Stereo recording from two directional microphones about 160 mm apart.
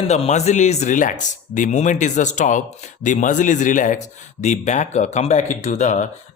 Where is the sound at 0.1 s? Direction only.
45° left (ahead or behind).